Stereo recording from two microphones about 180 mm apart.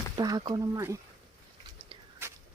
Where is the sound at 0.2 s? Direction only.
20° right (ahead or behind).